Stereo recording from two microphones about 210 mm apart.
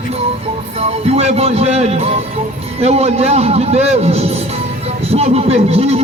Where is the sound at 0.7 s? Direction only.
30° right (ahead or behind).